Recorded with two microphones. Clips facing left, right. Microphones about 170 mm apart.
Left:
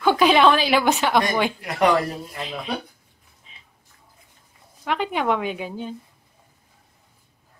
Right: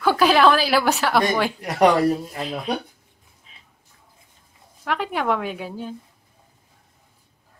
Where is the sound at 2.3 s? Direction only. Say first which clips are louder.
Right 3 dB; 40° right (ahead or behind).